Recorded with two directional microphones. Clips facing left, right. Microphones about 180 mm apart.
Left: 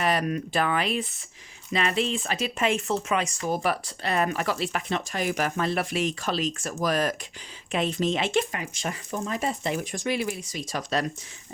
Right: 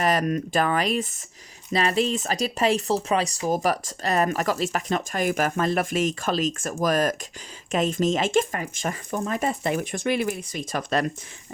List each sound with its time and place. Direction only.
0.0 s speech: 45° right (ahead or behind)